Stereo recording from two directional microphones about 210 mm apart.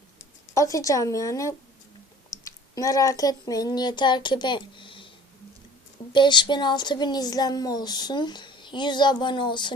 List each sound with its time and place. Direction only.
0.5 s a woman's voice: 15° left (ahead or behind)
6.1 s speech: 20° left (ahead or behind)